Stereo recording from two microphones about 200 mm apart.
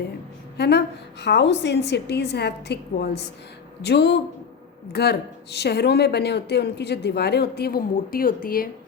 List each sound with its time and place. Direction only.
0.5 s a woman's voice: 55° left (ahead or behind)